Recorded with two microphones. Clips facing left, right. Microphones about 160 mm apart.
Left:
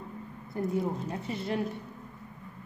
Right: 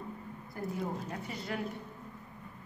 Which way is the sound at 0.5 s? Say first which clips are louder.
Left 7 dB; 25° left (ahead or behind).